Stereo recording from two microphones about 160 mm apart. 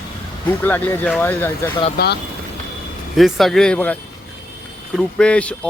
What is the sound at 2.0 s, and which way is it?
Speech, 70° left (ahead or behind).